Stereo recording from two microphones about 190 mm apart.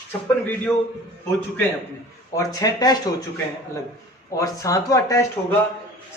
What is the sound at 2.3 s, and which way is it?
Speech, 20° left (ahead or behind).